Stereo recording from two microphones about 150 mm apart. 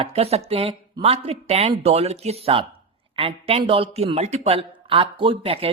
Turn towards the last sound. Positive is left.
turn(degrees=-40)  # may be behind; listen again after turning